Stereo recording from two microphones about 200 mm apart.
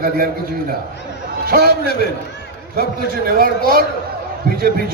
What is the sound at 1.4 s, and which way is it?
Speech, 50° right (ahead or behind).